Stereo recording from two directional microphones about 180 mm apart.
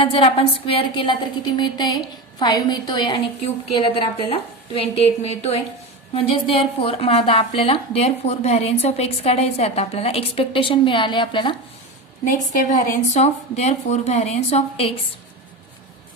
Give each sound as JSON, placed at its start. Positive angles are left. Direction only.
{"t": 0.0, "sound": "a woman's voice", "side_deg": 35}
{"t": 12.2, "sound": "a woman's voice", "side_deg": 45}